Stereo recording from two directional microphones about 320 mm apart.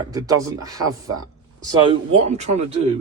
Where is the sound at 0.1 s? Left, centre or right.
Centre.